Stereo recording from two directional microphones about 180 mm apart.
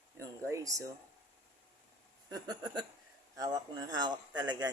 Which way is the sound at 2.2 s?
20° right (ahead or behind).